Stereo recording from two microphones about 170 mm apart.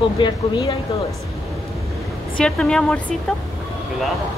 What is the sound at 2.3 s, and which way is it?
Speech, 5° left (ahead or behind).